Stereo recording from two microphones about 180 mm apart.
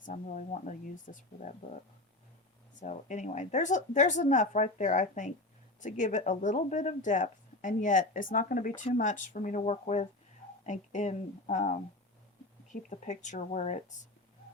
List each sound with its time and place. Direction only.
0.0 s speech: 45° left (ahead or behind)
2.8 s a woman's voice: 45° left (ahead or behind)